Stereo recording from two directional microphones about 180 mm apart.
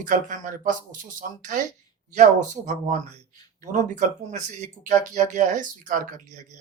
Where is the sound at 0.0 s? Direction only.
45° right (ahead or behind).